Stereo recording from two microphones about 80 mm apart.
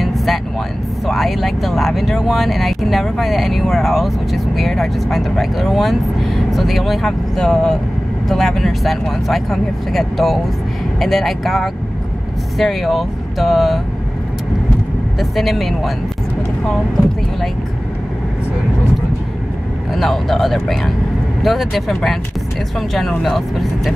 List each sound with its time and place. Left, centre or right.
0.0 s music: centre
1.0 s speech: centre
15.1 s speech: centre
19.9 s speech: centre